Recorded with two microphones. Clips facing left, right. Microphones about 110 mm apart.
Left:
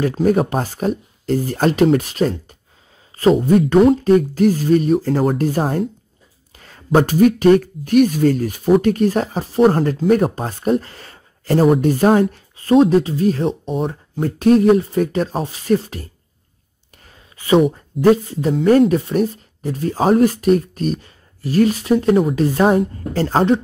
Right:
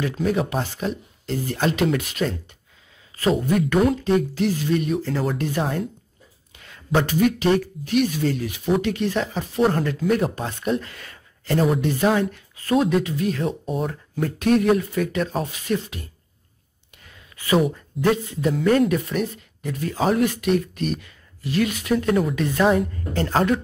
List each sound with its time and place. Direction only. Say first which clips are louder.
0.0 s speech: left 7 dB; 45° left (ahead or behind)
4.0 s speech: left 7 dB; 45° left (ahead or behind)
13.5 s speech: left 4 dB; centre (ahead or behind)
14.2 s speech: left 6 dB; 35° left (ahead or behind)
17.0 s a sound: even; 35° left (ahead or behind)
18.0 s speech: left 7 dB; 35° left (ahead or behind)